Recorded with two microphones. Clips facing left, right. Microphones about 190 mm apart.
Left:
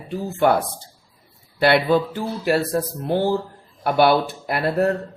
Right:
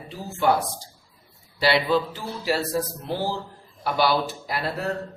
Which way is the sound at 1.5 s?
55° left (ahead or behind).